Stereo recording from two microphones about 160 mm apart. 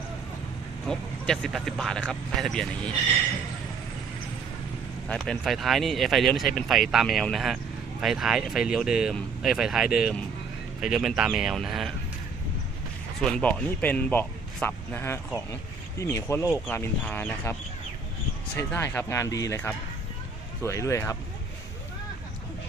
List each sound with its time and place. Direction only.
0.9 s speech: 5° left (ahead or behind)
5.0 s speech: centre (ahead or behind)
13.1 s speech: 5° left (ahead or behind)